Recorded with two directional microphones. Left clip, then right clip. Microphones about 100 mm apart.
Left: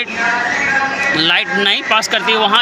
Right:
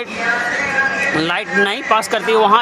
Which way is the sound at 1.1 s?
30° right (ahead or behind).